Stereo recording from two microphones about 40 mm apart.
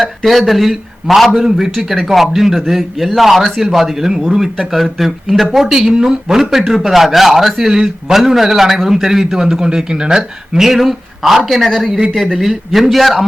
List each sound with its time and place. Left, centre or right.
0.3 s a man's voice: centre
7.7 s speech: centre
8.1 s a man's voice: centre